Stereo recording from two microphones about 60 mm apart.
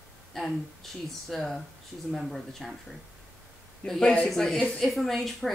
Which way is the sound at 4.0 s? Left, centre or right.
Centre.